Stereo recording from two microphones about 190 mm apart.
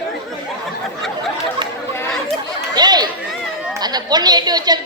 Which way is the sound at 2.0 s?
5° left (ahead or behind).